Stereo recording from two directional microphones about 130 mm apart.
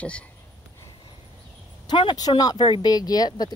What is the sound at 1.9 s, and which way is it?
Speech, 35° left (ahead or behind).